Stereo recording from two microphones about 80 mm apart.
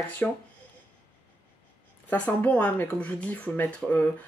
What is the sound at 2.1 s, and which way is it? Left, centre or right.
Speech, left.